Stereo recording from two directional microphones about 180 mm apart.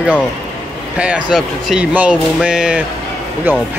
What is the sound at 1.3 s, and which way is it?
Speech, centre (ahead or behind).